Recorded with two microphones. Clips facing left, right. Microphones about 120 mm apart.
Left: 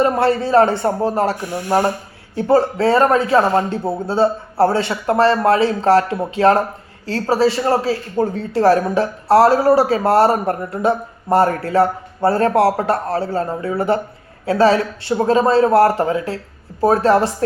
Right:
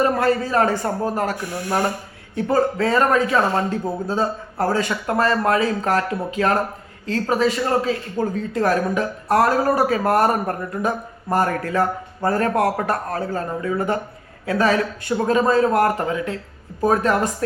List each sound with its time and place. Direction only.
0.0 s a man's voice: 30° left (ahead or behind)